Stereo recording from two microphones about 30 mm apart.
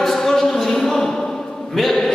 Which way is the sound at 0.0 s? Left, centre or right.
Centre.